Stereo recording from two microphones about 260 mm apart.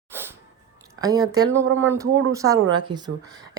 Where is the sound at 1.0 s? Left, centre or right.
Centre.